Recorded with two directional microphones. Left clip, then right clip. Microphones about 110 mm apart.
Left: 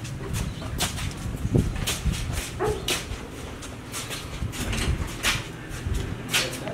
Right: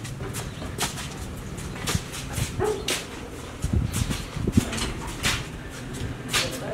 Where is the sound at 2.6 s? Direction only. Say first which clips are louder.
Right 1 dB; 35° left (ahead or behind).